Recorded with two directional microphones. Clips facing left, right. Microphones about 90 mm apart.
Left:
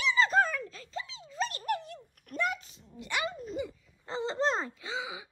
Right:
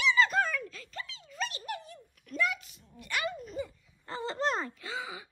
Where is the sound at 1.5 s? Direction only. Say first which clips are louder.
Left 6 dB; 50° left (ahead or behind).